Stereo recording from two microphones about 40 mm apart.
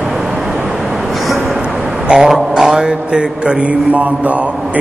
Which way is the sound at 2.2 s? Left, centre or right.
Centre.